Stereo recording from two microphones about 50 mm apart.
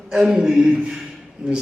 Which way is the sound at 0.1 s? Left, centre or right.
Centre.